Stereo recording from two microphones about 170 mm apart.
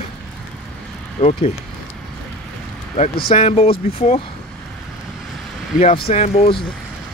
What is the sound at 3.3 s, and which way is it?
Speech, 35° left (ahead or behind).